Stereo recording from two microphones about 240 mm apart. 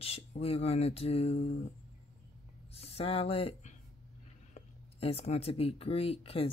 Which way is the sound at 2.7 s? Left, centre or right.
Left.